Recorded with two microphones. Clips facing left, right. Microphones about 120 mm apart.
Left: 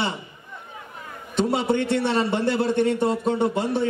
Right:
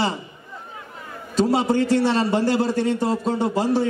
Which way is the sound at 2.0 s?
30° right (ahead or behind).